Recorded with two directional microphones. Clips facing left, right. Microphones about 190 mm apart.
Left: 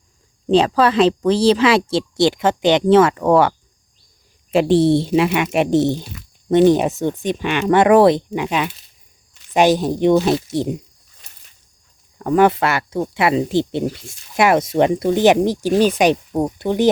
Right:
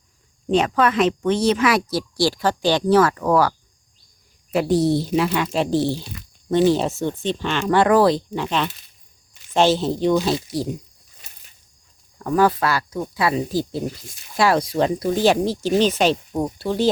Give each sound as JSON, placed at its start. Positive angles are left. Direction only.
{"t": 0.5, "sound": "speech", "side_deg": 30}
{"t": 4.5, "sound": "speech", "side_deg": 25}
{"t": 12.2, "sound": "speech", "side_deg": 20}